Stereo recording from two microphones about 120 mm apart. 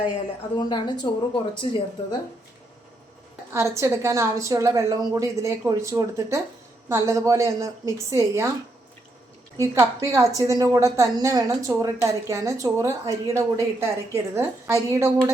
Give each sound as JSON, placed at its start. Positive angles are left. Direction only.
{"t": 0.5, "sound": "a woman's voice", "side_deg": 35}
{"t": 3.5, "sound": "a woman's voice", "side_deg": -25}
{"t": 9.6, "sound": "a woman's voice", "side_deg": -25}